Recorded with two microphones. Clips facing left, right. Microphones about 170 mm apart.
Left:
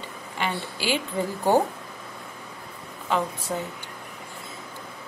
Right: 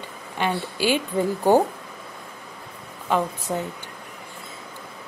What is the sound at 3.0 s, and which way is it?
Speech, 15° right (ahead or behind).